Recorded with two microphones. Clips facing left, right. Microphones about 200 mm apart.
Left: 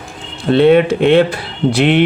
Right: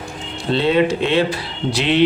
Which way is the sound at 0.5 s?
55° left (ahead or behind).